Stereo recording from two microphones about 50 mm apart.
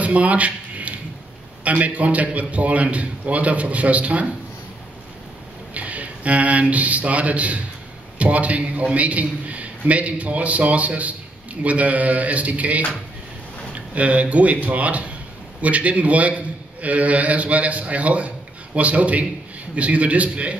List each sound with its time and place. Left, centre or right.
0.0 s a sound: right
1.6 s a man's voice: right
5.8 s a man's voice: right